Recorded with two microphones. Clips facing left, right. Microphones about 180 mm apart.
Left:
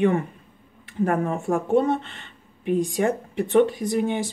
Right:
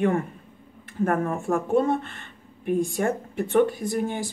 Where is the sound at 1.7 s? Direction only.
20° left (ahead or behind).